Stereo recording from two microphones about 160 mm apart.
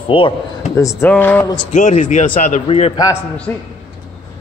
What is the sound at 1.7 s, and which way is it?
Speech, 50° left (ahead or behind).